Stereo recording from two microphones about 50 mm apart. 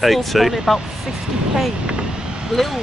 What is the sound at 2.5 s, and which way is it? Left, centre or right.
Speech, centre.